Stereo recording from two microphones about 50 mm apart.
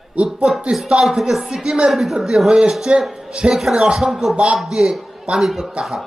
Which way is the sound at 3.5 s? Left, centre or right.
Centre.